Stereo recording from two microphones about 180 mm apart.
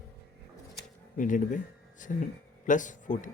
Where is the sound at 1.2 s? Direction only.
45° left (ahead or behind).